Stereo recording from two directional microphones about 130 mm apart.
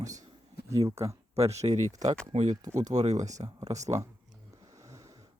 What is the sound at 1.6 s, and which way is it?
Speech, 60° right (ahead or behind).